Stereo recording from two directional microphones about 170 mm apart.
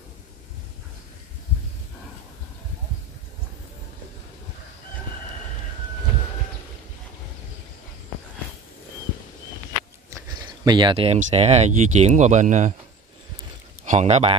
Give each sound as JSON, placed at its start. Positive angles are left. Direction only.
{"t": 10.6, "sound": "speech", "side_deg": -25}
{"t": 13.8, "sound": "speech", "side_deg": -45}